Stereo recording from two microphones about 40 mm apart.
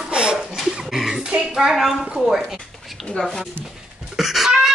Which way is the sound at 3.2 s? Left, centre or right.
Centre.